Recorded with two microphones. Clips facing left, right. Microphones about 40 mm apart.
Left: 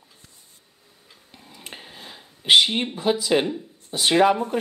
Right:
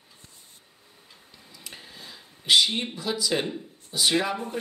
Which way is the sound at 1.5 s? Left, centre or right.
Left.